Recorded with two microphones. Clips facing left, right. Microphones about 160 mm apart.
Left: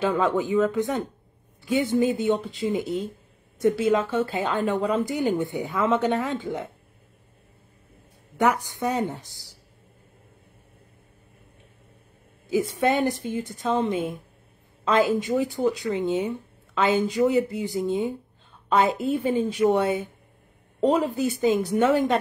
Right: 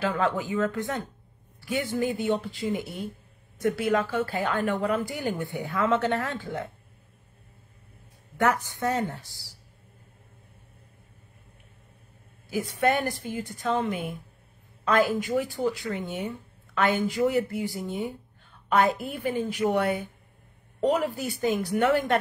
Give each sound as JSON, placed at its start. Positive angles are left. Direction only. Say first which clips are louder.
{"t": 0.0, "sound": "speech", "louder": "left 4 dB", "side_deg": 20}
{"t": 8.4, "sound": "a woman's voice", "louder": "left 2 dB", "side_deg": 15}
{"t": 12.4, "sound": "speech", "louder": "left 3 dB", "side_deg": 20}